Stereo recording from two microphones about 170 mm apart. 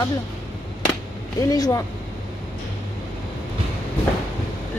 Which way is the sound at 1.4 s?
20° left (ahead or behind).